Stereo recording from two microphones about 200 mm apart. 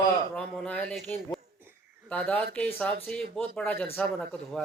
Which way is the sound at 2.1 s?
5° left (ahead or behind).